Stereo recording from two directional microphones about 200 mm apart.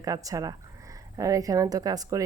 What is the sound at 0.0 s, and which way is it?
Speech, 15° right (ahead or behind).